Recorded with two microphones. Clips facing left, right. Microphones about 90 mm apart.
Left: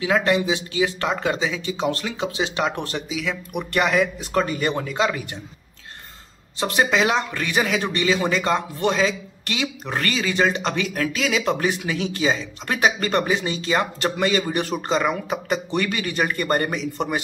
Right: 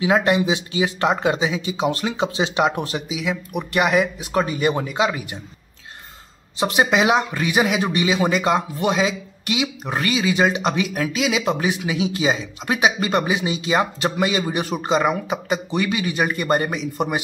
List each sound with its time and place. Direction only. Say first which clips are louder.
0.0 s speech: right 2 dB; 20° right (ahead or behind)
6.6 s speech: right 2 dB; 15° right (ahead or behind)